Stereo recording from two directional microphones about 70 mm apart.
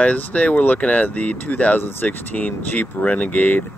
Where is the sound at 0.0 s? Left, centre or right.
Left.